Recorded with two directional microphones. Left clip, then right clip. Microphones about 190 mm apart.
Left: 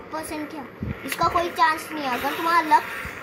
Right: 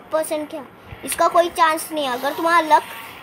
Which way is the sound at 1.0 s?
50° right (ahead or behind).